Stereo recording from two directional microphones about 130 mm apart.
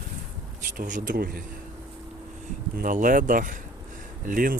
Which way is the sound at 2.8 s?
90° right.